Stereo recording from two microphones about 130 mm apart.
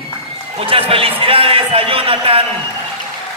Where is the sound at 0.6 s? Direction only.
45° right (ahead or behind).